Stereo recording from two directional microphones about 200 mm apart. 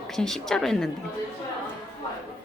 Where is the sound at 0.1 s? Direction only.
Centre (ahead or behind).